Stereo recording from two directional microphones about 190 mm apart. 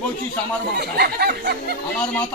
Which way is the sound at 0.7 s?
55° right (ahead or behind).